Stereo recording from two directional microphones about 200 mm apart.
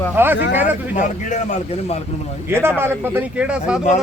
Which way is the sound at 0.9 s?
40° left (ahead or behind).